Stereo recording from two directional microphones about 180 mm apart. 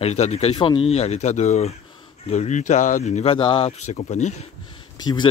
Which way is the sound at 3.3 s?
30° left (ahead or behind).